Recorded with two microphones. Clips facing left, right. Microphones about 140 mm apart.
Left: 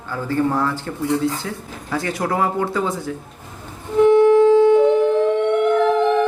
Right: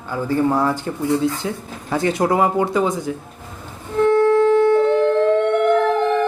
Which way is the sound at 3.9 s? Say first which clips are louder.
Left 3 dB; 15° left (ahead or behind).